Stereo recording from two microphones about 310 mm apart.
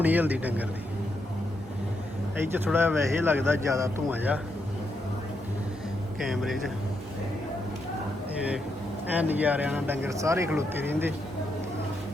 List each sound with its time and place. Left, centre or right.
0.0 s a man's voice: centre
2.6 s speech: centre
6.2 s a man's voice: centre
9.1 s speech: centre